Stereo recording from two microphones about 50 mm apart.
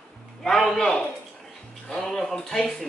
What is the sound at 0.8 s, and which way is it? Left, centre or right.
Speech, centre.